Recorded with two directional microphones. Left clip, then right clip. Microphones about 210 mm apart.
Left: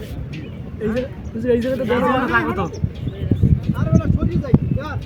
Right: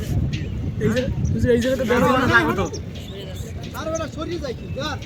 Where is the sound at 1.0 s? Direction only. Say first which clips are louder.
Right 1 dB; 45° left (ahead or behind).